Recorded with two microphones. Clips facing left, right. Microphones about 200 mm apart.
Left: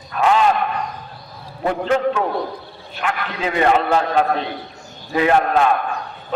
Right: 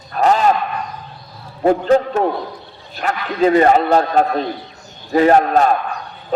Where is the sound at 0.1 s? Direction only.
40° right (ahead or behind).